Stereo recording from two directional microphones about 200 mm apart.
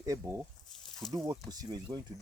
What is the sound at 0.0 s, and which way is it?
Speech, 15° right (ahead or behind).